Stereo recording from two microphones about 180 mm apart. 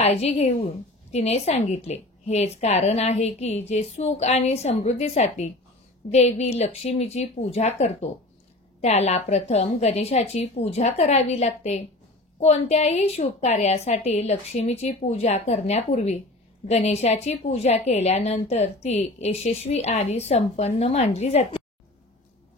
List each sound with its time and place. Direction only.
0.0 s a woman's voice: 35° left (ahead or behind)